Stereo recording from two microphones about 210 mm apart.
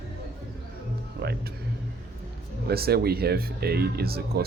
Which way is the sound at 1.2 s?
50° right (ahead or behind).